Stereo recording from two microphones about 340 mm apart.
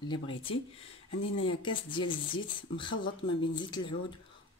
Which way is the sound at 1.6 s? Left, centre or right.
Centre.